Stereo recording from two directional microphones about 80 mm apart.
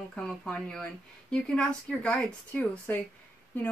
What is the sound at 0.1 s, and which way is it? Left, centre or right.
Speech, centre.